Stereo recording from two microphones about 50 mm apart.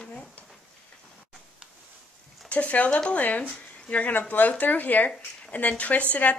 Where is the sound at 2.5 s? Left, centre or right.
Left.